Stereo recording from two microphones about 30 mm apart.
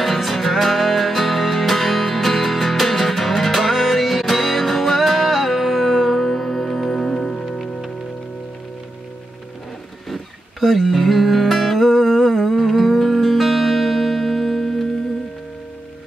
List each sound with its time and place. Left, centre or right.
0.0 s music: centre
10.0 s music: centre